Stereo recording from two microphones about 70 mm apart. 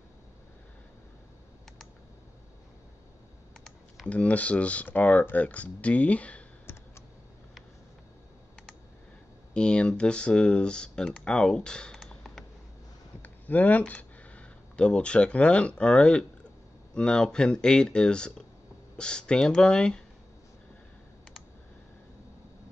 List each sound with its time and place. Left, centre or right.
3.6 s typing: centre
4.1 s speech: left
9.5 s speech: centre
13.2 s a sound: left
14.9 s speech: centre